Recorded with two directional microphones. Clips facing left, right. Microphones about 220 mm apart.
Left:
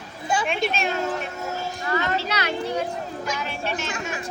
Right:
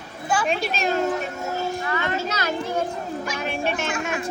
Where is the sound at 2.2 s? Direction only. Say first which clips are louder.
Even; 45° right (ahead or behind).